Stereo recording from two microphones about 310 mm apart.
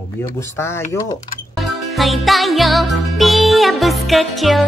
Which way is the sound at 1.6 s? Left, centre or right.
Centre.